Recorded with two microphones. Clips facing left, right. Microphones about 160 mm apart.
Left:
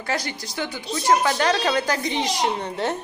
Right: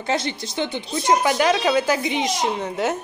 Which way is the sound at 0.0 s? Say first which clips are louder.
Right 4 dB; 25° right (ahead or behind).